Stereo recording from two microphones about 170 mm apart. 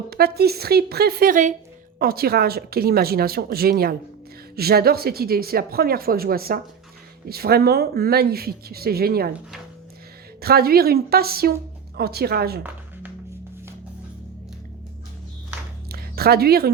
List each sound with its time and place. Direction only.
0.1 s a woman's voice: 65° right (ahead or behind); by 1.5 s 50° right (ahead or behind)
2.0 s speech: 65° right (ahead or behind)
10.4 s a woman's voice: 65° right (ahead or behind)
15.9 s music: 65° right (ahead or behind)